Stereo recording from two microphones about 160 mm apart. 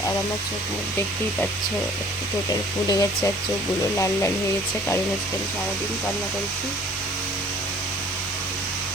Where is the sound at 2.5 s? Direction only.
20° left (ahead or behind).